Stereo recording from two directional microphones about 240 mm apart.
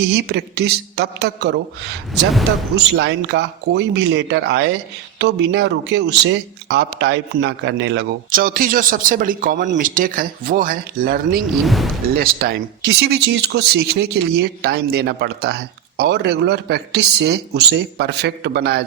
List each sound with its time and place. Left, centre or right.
0.1 s speech: right
2.7 s speech: right
11.6 s speech: centre
12.1 s speech: right